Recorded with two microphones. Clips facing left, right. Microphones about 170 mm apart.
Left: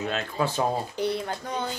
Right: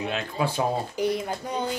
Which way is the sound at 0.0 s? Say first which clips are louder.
Even; 15° right (ahead or behind).